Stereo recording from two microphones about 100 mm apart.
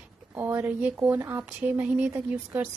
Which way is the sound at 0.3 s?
20° right (ahead or behind).